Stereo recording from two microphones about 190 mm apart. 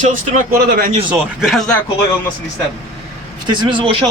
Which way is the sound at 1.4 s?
Centre (ahead or behind).